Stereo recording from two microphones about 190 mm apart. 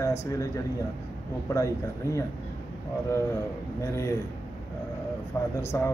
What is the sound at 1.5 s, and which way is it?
Speech, 15° left (ahead or behind).